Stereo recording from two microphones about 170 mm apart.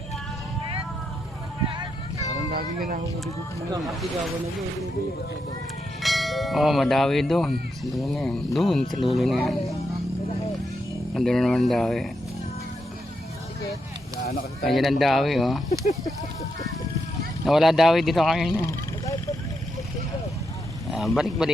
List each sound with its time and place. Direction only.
2.5 s speech: 60° right (ahead or behind)
6.0 s bell: centre (ahead or behind)
11.1 s bell: centre (ahead or behind)
14.2 s speech: 65° left (ahead or behind)
14.7 s bell: centre (ahead or behind)
16.0 s speech: 20° left (ahead or behind)
17.4 s bell: centre (ahead or behind)
18.5 s a sound: 20° left (ahead or behind)
20.9 s bell: centre (ahead or behind)